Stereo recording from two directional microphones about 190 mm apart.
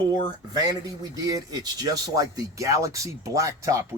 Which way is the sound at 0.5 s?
20° right (ahead or behind).